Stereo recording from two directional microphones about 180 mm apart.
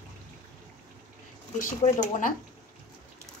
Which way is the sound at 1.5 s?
45° left (ahead or behind).